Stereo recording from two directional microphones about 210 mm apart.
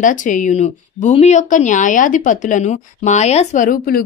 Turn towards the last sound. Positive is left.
turn(degrees=40)  # may be behind; listen again after turning